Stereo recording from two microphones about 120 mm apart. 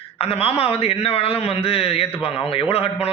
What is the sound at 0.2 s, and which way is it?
Speech, 50° left (ahead or behind).